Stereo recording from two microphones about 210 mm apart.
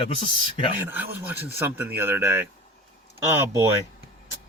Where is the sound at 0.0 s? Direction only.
25° left (ahead or behind).